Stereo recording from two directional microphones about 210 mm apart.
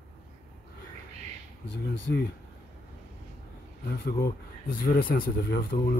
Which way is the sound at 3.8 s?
45° left (ahead or behind).